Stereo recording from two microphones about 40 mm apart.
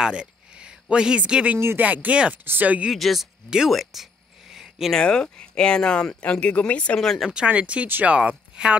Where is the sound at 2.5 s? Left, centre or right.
Right.